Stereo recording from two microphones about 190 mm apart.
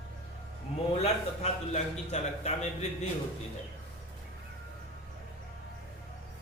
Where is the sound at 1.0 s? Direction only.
35° left (ahead or behind).